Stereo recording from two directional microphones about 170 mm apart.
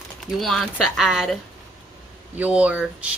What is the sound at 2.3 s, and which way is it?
Speech, 10° right (ahead or behind).